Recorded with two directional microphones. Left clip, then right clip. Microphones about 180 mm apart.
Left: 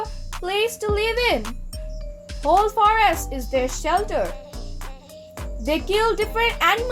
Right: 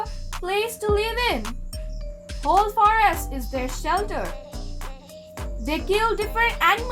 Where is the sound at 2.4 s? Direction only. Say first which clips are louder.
Left 2 dB; centre (ahead or behind).